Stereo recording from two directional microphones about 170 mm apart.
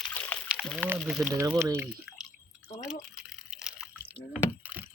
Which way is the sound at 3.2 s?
5° right (ahead or behind).